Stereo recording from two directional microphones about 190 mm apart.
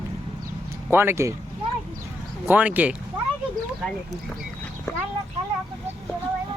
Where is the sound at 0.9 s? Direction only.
10° right (ahead or behind).